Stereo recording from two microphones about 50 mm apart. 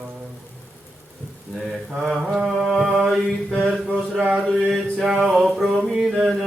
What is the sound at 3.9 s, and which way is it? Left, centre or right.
Mantra, centre.